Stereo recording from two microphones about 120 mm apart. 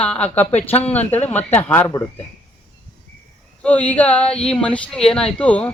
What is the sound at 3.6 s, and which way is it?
Speech, 10° left (ahead or behind).